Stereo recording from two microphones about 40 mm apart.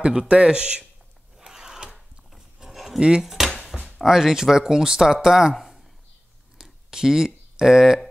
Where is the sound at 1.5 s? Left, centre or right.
Centre.